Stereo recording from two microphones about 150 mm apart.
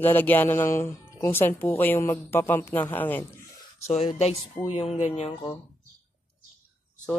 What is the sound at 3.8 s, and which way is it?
Speech, 45° left (ahead or behind).